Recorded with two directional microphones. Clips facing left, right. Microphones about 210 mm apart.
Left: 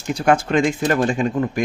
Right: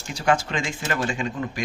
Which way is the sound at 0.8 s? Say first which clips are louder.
Left 8 dB; 40° left (ahead or behind).